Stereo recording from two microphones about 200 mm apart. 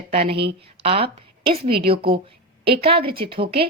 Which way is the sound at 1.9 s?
25° right (ahead or behind).